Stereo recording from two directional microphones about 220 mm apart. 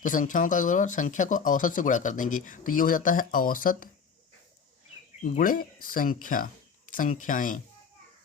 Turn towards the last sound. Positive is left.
turn(degrees=35)  # may be behind; listen again after turning